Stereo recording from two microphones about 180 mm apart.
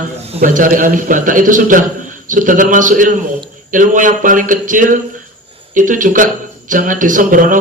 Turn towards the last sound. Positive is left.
turn(degrees=-50)  # may be behind; listen again after turning